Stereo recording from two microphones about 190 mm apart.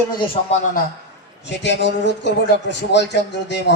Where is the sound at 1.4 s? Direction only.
65° left (ahead or behind).